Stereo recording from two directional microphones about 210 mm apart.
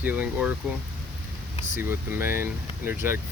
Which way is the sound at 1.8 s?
10° right (ahead or behind).